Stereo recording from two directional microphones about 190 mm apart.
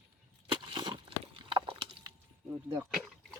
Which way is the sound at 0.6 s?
25° right (ahead or behind).